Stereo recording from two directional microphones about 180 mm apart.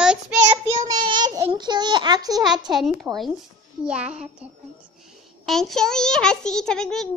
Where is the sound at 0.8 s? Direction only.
25° right (ahead or behind).